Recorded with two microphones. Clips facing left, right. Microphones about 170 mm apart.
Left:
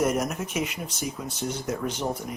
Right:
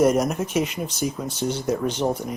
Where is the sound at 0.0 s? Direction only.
35° right (ahead or behind).